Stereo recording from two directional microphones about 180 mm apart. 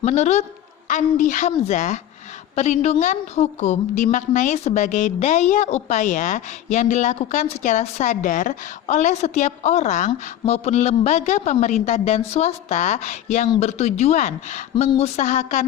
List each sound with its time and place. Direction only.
0.0 s a woman's voice: 40° left (ahead or behind)